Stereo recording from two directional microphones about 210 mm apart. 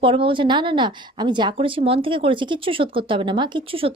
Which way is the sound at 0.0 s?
25° right (ahead or behind).